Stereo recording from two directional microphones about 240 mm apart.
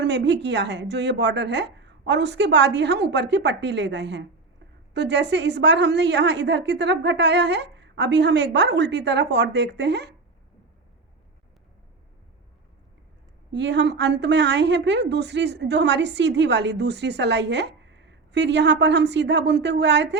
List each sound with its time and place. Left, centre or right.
0.0 s a woman's voice: right
13.5 s a woman's voice: right